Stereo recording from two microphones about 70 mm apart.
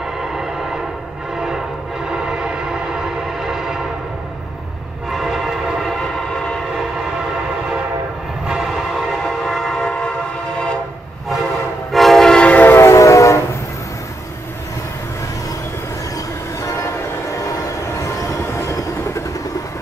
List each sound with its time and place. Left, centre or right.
0.0 s train: centre
5.1 s train: centre
8.5 s train: centre
9.2 s train: centre
11.9 s train horn: centre; by 12.7 s left
12.7 s train: left
13.0 s train: left
16.6 s train: left